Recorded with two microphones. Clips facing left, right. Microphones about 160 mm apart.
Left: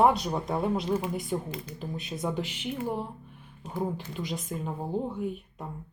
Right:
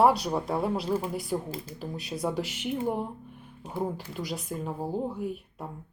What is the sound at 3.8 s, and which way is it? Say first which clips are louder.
Speech: even; 5° right (ahead or behind).